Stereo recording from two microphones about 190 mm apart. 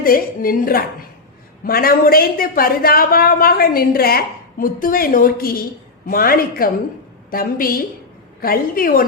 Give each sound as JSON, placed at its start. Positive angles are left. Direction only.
{"t": 0.0, "sound": "a woman's voice", "side_deg": 50}